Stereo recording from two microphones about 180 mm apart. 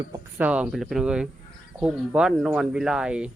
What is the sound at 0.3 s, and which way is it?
Speech, 10° right (ahead or behind).